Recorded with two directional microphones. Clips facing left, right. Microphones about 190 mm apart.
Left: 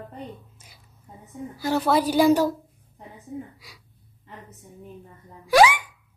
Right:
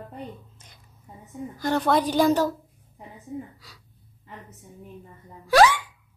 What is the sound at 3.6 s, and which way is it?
Speech, 10° left (ahead or behind).